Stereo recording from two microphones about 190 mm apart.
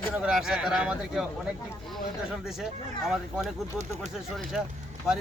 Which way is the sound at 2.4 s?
5° right (ahead or behind).